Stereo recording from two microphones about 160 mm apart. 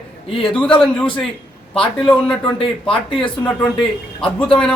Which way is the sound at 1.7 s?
5° left (ahead or behind).